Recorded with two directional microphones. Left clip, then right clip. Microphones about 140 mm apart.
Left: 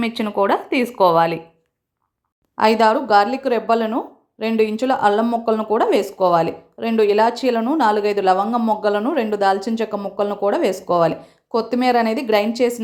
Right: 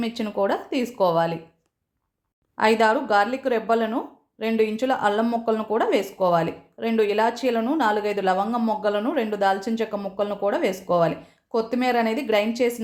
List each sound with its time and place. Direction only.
0.2 s speech: 20° left (ahead or behind)
2.6 s speech: 35° left (ahead or behind)